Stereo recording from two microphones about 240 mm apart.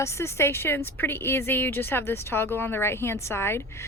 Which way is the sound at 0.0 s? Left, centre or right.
Centre.